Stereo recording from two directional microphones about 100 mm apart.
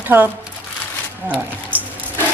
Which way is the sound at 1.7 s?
15° right (ahead or behind).